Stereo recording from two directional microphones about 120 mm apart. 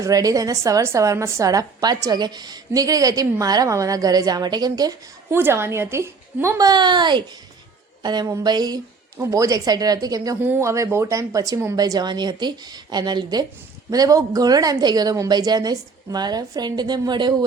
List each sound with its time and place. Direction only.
0.0 s a woman's voice: 30° right (ahead or behind)
5.3 s a woman's voice: 20° right (ahead or behind)
10.4 s a woman's voice: 20° right (ahead or behind); by 17.3 s 40° right (ahead or behind)